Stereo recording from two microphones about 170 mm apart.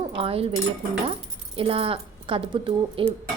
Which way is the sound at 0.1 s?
35° right (ahead or behind).